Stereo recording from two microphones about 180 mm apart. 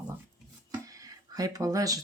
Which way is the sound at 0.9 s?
20° right (ahead or behind).